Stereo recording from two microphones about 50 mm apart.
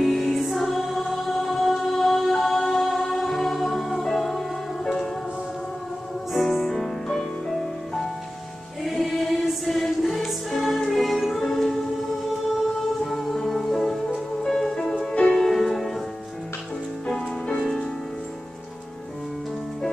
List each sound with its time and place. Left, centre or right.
0.0 s music: centre
6.3 s music: centre
8.8 s choir: centre
13.0 s music: centre
15.0 s music: left
15.3 s music: centre
17.1 s music: centre